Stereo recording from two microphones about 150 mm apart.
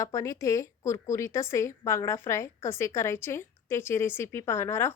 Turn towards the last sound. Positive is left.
turn(degrees=15)  # may be behind; listen again after turning